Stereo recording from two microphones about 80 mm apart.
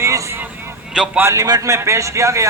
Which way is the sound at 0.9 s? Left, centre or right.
Centre.